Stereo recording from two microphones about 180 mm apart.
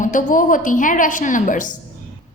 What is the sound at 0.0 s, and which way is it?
A woman's voice, 45° left (ahead or behind).